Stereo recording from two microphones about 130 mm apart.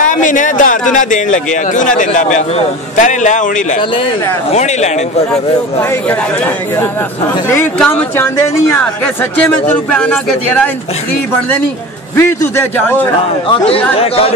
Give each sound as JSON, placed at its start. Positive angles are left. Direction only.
{"t": 0.0, "sound": "a man's voice", "side_deg": 85}
{"t": 4.5, "sound": "speech", "side_deg": 60}
{"t": 5.8, "sound": "speech", "side_deg": 15}
{"t": 12.2, "sound": "speech", "side_deg": 20}
{"t": 13.5, "sound": "speech", "side_deg": 45}